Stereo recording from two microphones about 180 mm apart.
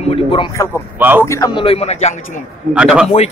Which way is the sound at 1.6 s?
35° left (ahead or behind).